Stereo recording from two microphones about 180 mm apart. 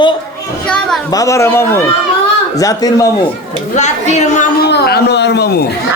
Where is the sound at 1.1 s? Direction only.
20° left (ahead or behind).